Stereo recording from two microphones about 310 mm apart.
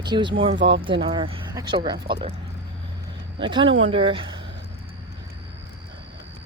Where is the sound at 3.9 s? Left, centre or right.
Centre.